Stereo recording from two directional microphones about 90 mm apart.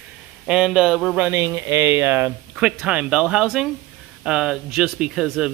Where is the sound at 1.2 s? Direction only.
20° right (ahead or behind).